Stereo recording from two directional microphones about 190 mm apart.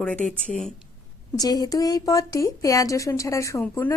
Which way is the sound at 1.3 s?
20° left (ahead or behind).